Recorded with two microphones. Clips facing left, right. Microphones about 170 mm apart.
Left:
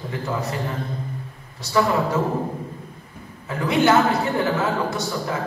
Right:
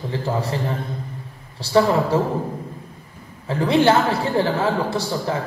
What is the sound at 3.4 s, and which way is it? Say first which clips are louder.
A man's voice: right 2 dB; 30° right (ahead or behind).